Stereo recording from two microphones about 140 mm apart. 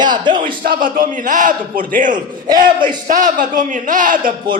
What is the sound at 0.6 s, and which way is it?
A man's voice, 85° right.